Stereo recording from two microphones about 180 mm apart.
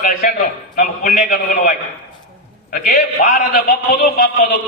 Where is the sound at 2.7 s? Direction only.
55° left (ahead or behind).